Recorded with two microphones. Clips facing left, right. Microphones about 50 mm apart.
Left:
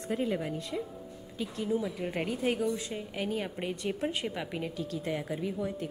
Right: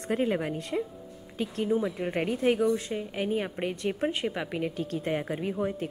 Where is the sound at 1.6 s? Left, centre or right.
Right.